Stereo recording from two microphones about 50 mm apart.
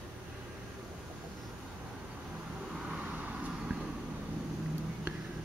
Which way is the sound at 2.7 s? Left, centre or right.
Centre.